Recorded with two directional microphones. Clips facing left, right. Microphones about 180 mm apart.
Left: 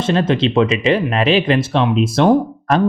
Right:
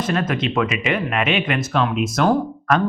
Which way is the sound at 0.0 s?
30° left (ahead or behind).